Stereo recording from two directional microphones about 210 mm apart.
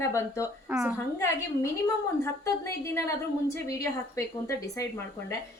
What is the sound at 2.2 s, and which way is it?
A woman's voice, 15° left (ahead or behind).